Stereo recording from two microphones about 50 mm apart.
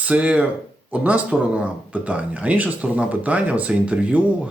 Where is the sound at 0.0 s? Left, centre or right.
Right.